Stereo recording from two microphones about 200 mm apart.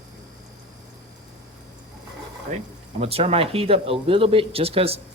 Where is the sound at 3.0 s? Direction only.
30° right (ahead or behind).